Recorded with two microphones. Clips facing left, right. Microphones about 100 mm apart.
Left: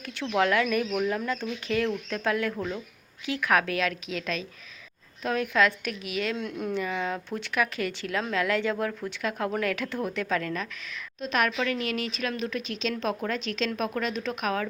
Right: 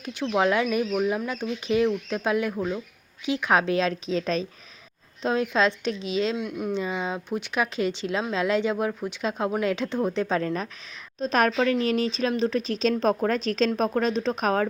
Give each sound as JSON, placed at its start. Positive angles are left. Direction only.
{"t": 0.0, "sound": "speech", "side_deg": -20}
{"t": 6.3, "sound": "speech", "side_deg": -10}
{"t": 6.7, "sound": "speech", "side_deg": -20}